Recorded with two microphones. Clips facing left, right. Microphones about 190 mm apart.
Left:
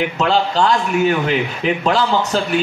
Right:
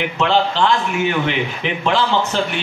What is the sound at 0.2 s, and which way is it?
A man's voice, 40° left (ahead or behind).